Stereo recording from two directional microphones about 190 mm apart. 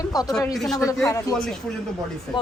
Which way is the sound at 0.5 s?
Centre (ahead or behind).